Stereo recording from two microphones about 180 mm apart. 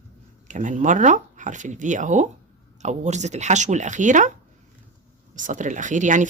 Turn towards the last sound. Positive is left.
turn(degrees=-45)  # may be behind; listen again after turning